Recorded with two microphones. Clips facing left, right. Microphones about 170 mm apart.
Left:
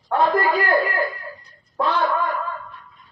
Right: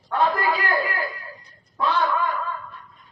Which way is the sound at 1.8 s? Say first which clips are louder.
Left 1 dB; 45° left (ahead or behind).